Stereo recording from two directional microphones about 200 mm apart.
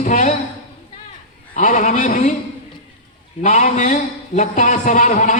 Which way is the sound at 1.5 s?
40° left (ahead or behind).